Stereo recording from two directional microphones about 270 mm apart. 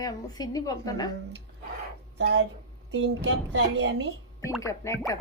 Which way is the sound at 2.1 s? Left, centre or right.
Right.